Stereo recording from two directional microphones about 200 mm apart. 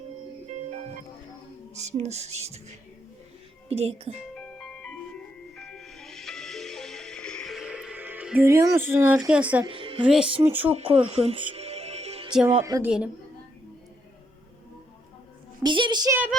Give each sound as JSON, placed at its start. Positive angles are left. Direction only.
{"t": 1.7, "sound": "music", "side_deg": -35}
{"t": 4.4, "sound": "music", "side_deg": 5}
{"t": 9.6, "sound": "music", "side_deg": -25}
{"t": 10.0, "sound": "speech", "side_deg": -5}
{"t": 10.7, "sound": "music", "side_deg": -30}
{"t": 12.3, "sound": "speech", "side_deg": -5}
{"t": 12.6, "sound": "speech", "side_deg": -15}
{"t": 15.6, "sound": "a child's voice", "side_deg": -25}